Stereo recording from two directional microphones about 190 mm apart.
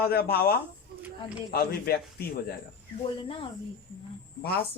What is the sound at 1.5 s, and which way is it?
Speech, 55° left (ahead or behind).